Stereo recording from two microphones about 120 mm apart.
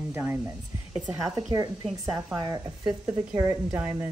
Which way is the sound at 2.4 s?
30° right (ahead or behind).